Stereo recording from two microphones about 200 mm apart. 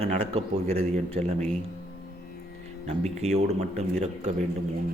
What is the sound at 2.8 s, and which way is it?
Speech, 35° right (ahead or behind).